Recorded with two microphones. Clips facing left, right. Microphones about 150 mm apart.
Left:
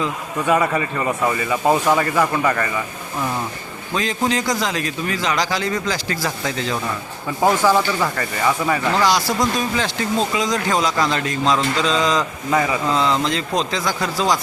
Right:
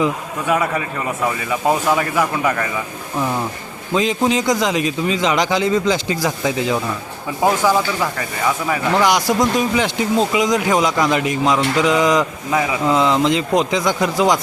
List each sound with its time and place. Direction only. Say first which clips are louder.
0.4 s speech: left 1 dB; centre (ahead or behind)
3.9 s a man's voice: right 4 dB; 20° right (ahead or behind); by 8.8 s centre (ahead or behind)
9.0 s a man's voice: right 5 dB; 20° right (ahead or behind)
12.5 s speech: even; 5° right (ahead or behind)
12.8 s a man's voice: right 4 dB; 15° right (ahead or behind)